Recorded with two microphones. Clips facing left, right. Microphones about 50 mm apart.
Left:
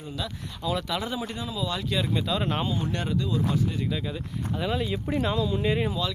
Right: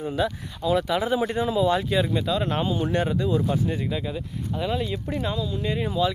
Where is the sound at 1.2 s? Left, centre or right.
Right.